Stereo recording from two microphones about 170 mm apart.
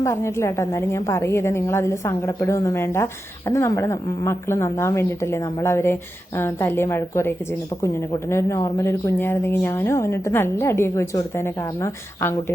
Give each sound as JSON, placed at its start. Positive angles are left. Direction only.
{"t": 0.0, "sound": "a woman's voice", "side_deg": 15}